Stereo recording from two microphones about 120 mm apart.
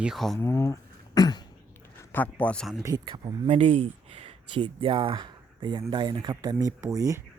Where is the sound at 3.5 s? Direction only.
65° right (ahead or behind).